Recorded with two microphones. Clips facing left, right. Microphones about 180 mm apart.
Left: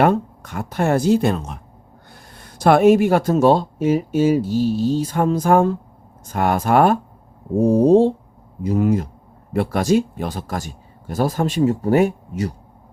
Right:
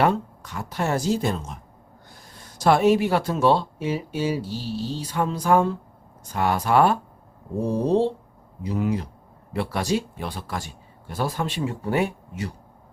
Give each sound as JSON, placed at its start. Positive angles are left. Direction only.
{"t": 0.0, "sound": "speech", "side_deg": 50}